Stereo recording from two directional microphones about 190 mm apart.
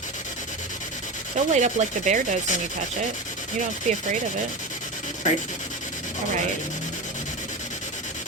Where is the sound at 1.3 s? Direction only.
40° right (ahead or behind).